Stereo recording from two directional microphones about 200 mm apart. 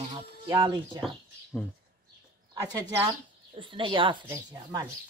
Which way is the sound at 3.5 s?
25° right (ahead or behind).